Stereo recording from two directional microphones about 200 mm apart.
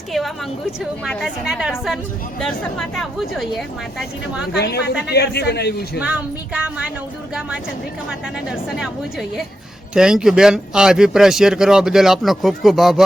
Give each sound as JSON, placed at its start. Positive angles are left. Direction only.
{"t": 1.0, "sound": "speech", "side_deg": 0}
{"t": 4.5, "sound": "speech", "side_deg": 55}
{"t": 6.0, "sound": "speech", "side_deg": -5}
{"t": 8.4, "sound": "speech", "side_deg": 0}